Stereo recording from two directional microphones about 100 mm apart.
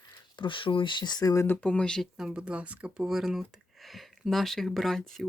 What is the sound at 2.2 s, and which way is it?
Speech, 10° right (ahead or behind).